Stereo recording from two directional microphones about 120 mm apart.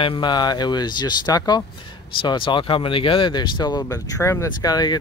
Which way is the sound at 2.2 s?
45° left (ahead or behind).